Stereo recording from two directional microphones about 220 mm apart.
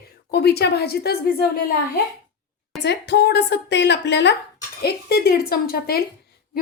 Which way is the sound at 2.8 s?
50° left (ahead or behind).